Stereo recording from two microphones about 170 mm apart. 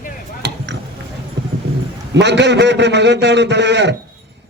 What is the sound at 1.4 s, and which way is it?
Dog, 90° right.